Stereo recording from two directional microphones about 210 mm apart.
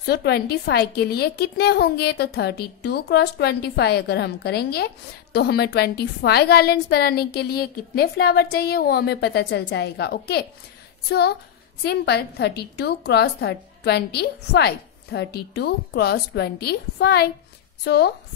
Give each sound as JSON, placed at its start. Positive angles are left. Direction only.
{"t": 0.0, "sound": "a woman's voice", "side_deg": 50}